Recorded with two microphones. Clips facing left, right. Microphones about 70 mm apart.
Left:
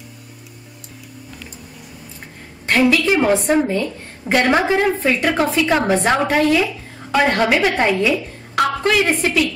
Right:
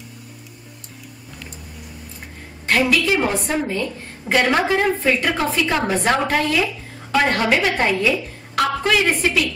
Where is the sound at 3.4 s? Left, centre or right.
Centre.